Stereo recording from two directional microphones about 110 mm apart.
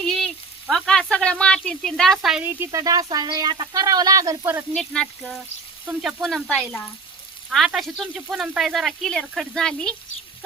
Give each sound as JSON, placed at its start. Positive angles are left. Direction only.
{"t": 0.0, "sound": "frying", "side_deg": 5}
{"t": 0.7, "sound": "a woman's voice", "side_deg": 5}
{"t": 2.4, "sound": "speech", "side_deg": -15}
{"t": 2.7, "sound": "speech", "side_deg": -35}
{"t": 4.7, "sound": "a woman's voice", "side_deg": 5}